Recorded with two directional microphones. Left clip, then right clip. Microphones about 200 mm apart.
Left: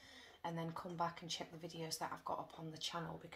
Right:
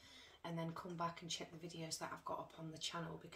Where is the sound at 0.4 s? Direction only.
30° left (ahead or behind).